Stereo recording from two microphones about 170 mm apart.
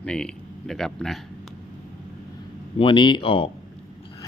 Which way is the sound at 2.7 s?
30° left (ahead or behind).